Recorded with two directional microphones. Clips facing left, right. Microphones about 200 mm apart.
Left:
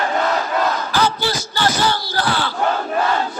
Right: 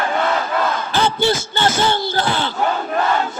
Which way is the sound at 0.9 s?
25° right (ahead or behind).